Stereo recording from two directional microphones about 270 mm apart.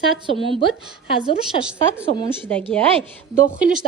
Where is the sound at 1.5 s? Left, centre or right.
Left.